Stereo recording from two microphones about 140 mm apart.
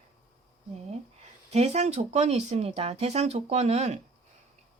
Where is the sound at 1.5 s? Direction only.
50° right (ahead or behind).